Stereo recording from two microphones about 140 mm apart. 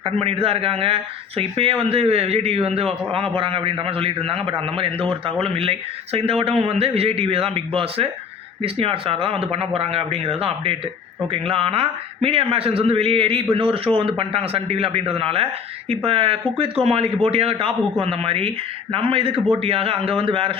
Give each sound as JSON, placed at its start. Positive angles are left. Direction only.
{"t": 0.0, "sound": "a man's voice", "side_deg": -45}